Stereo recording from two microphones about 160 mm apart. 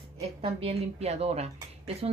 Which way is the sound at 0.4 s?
35° right (ahead or behind).